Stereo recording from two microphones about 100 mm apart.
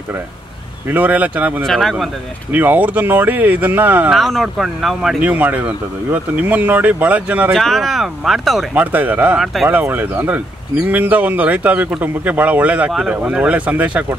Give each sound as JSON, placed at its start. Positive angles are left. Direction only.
{"t": 0.8, "sound": "speech", "side_deg": -15}
{"t": 1.6, "sound": "speech", "side_deg": 0}
{"t": 2.5, "sound": "speech", "side_deg": -15}
{"t": 4.1, "sound": "speech", "side_deg": 0}
{"t": 5.2, "sound": "speech", "side_deg": -15}
{"t": 7.5, "sound": "speech", "side_deg": 0}
{"t": 8.7, "sound": "speech", "side_deg": -15}
{"t": 9.4, "sound": "speech", "side_deg": 0}
{"t": 9.7, "sound": "speech", "side_deg": -15}